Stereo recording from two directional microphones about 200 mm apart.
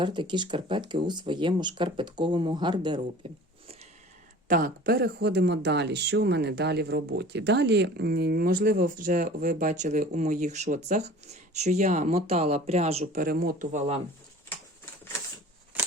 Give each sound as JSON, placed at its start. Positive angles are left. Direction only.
{"t": 0.0, "sound": "speech", "side_deg": -25}
{"t": 4.4, "sound": "speech", "side_deg": -45}
{"t": 13.2, "sound": "speech", "side_deg": -50}